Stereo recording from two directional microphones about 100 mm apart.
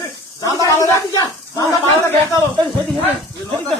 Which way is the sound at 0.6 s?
35° left (ahead or behind).